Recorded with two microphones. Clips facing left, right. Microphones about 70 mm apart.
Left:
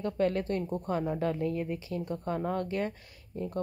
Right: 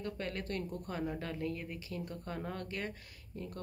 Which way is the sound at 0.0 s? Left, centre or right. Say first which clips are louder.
Left 11 dB; left.